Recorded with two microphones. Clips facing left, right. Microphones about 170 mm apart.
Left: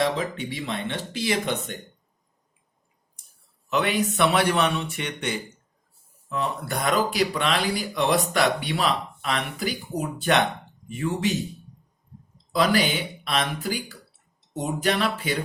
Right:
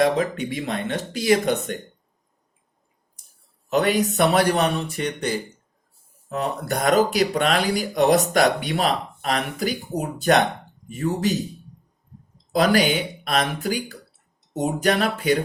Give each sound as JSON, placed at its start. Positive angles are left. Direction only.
{"t": 0.0, "sound": "speech", "side_deg": -45}
{"t": 3.7, "sound": "speech", "side_deg": -40}
{"t": 12.5, "sound": "speech", "side_deg": -45}